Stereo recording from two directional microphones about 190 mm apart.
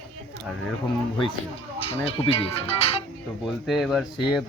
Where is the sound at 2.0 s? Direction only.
30° left (ahead or behind).